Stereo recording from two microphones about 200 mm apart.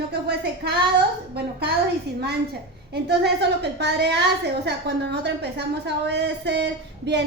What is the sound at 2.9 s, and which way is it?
A woman's voice, 55° right (ahead or behind).